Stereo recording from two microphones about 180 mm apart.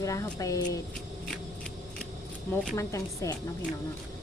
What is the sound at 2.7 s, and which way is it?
Speech, 15° left (ahead or behind).